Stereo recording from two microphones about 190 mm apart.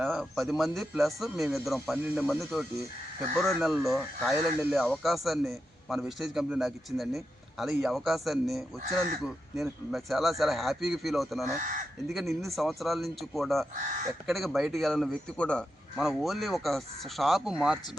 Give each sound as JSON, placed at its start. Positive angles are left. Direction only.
{"t": 0.0, "sound": "speech", "side_deg": 0}
{"t": 11.6, "sound": "speech", "side_deg": -45}
{"t": 12.1, "sound": "speech", "side_deg": 0}
{"t": 13.7, "sound": "speech", "side_deg": -40}
{"t": 14.3, "sound": "speech", "side_deg": 0}